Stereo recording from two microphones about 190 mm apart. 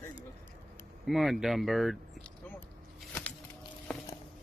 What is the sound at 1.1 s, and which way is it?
Speech, centre (ahead or behind).